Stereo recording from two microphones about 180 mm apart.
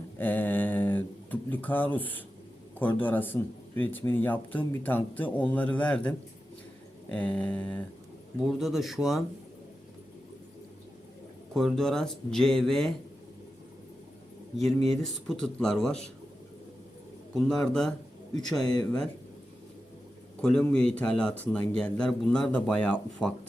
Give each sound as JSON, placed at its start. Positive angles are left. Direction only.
{"t": 0.2, "sound": "a sound", "side_deg": 10}
{"t": 2.7, "sound": "speech", "side_deg": 10}
{"t": 11.5, "sound": "speech", "side_deg": 0}
{"t": 15.0, "sound": "speech", "side_deg": 0}
{"t": 17.3, "sound": "speech", "side_deg": 0}
{"t": 18.7, "sound": "speech", "side_deg": 20}
{"t": 20.4, "sound": "speech", "side_deg": 5}